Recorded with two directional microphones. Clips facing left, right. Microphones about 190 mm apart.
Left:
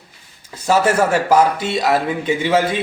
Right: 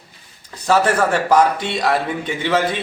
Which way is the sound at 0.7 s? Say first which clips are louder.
Left 1 dB; 10° left (ahead or behind).